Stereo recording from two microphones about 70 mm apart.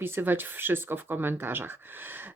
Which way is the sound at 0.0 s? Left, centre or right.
Right.